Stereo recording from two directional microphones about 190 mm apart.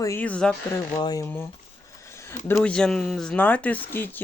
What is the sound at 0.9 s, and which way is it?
Speech, 20° left (ahead or behind).